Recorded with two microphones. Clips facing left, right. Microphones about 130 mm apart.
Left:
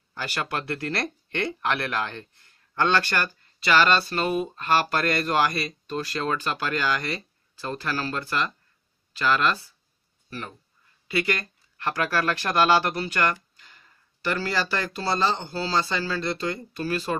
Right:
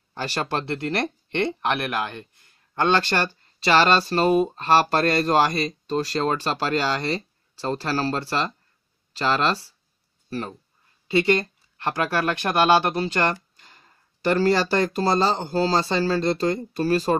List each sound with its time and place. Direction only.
0.1 s speech: 30° right (ahead or behind)
11.1 s speech: 25° right (ahead or behind)